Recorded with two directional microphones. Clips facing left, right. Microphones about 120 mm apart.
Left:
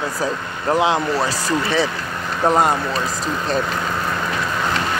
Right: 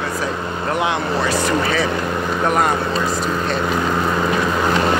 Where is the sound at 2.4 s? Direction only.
25° left (ahead or behind).